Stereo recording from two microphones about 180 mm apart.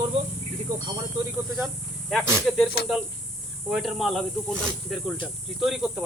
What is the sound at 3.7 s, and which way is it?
Speech, centre (ahead or behind).